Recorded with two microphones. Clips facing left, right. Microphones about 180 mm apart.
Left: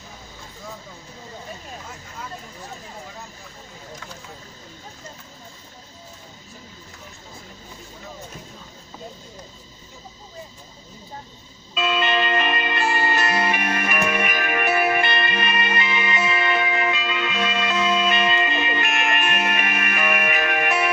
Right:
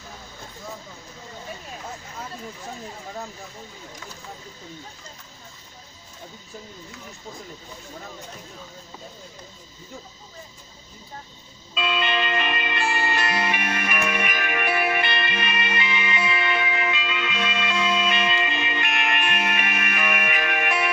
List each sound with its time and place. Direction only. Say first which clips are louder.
11.8 s music: left 3 dB; 45° left (ahead or behind)